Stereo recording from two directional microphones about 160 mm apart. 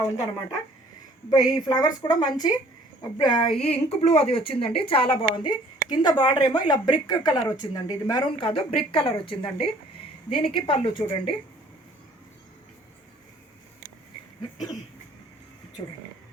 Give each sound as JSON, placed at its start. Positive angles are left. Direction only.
{"t": 1.3, "sound": "a woman's voice", "side_deg": 25}
{"t": 3.6, "sound": "a woman's voice", "side_deg": 40}